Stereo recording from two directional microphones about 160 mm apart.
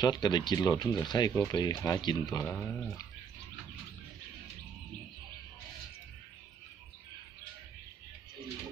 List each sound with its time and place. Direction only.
0.0 s speech: 25° left (ahead or behind)
2.4 s speech: 5° left (ahead or behind)